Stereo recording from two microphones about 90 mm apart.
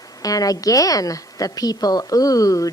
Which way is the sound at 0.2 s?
40° left (ahead or behind).